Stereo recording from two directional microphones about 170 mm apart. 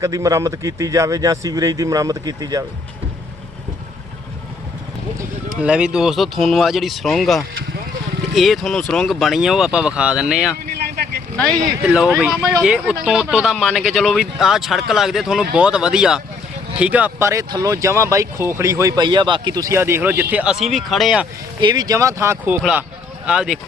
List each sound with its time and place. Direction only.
0.0 s speech: 20° right (ahead or behind)
5.5 s speech: 5° right (ahead or behind)
10.8 s vehicle: 65° right (ahead or behind)
11.8 s speech: 5° right (ahead or behind)
21.6 s speech: 25° right (ahead or behind)
23.2 s speech: 5° right (ahead or behind)